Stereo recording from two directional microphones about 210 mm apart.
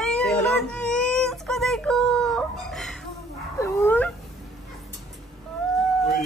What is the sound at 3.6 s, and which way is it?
Dog, 10° left (ahead or behind).